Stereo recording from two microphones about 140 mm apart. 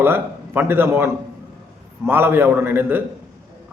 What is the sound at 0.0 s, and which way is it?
Speech, 15° right (ahead or behind).